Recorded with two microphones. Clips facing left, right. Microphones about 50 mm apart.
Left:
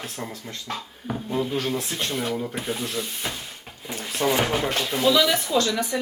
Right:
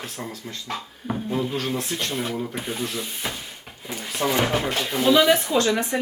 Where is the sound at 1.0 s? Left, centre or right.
Centre.